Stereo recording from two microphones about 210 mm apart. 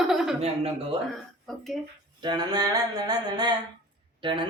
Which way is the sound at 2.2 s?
20° right (ahead or behind).